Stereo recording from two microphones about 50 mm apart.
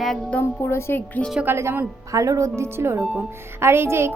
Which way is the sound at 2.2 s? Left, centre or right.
Right.